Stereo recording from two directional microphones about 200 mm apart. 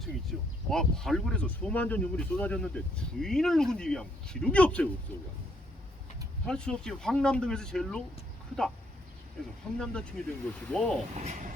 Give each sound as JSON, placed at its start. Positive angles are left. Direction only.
{"t": 0.0, "sound": "speech", "side_deg": 0}
{"t": 6.4, "sound": "speech", "side_deg": 5}
{"t": 9.7, "sound": "speech", "side_deg": 5}
{"t": 11.1, "sound": "speech", "side_deg": -35}